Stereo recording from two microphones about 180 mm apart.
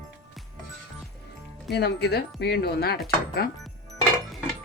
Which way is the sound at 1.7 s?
65° left (ahead or behind).